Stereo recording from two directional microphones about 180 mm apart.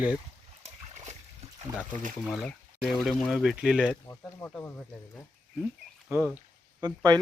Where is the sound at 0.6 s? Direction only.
40° right (ahead or behind).